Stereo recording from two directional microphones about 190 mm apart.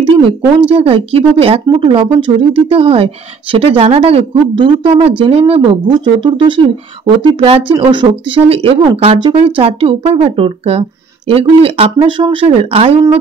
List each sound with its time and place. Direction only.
0.7 s speech: 30° right (ahead or behind)